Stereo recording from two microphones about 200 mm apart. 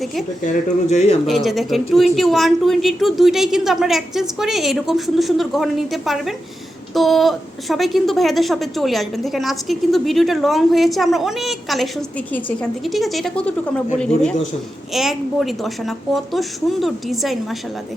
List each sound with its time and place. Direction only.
0.4 s speech: 35° left (ahead or behind)
1.3 s a woman's voice: centre (ahead or behind)